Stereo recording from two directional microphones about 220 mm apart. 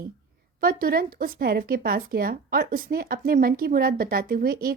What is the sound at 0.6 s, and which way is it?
Speech, 40° right (ahead or behind).